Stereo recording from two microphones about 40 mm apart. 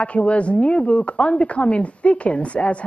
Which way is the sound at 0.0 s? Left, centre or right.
Left.